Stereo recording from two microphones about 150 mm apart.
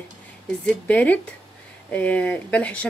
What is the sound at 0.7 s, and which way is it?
Speech, 10° left (ahead or behind).